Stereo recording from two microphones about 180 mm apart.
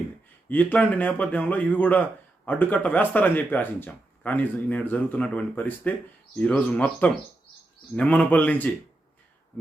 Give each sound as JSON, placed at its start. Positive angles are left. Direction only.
{"t": 0.4, "sound": "speech", "side_deg": 10}